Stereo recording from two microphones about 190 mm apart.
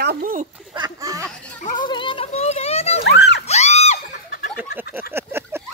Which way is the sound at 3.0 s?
65° left (ahead or behind).